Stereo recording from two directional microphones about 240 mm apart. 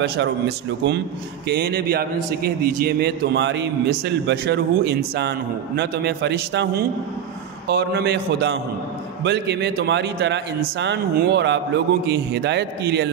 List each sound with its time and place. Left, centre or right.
1.5 s a man's voice: right